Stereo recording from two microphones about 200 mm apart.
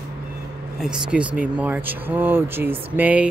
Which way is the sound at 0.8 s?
5° right (ahead or behind).